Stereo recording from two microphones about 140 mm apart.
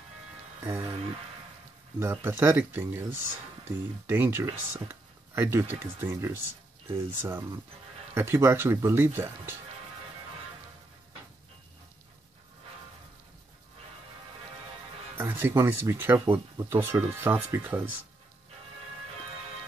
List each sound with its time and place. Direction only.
0.7 s speech: 20° right (ahead or behind)
2.0 s speech: 15° right (ahead or behind)
15.2 s speech: 15° right (ahead or behind)